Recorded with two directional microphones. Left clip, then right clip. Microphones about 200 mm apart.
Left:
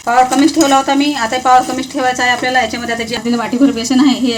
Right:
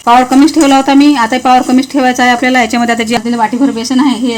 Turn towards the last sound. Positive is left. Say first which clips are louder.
# right 1 dB
turn(degrees=-35)  # may be behind; listen again after turning